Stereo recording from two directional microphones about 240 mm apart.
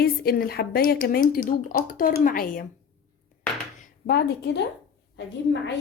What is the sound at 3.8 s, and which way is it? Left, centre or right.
A woman's voice, left.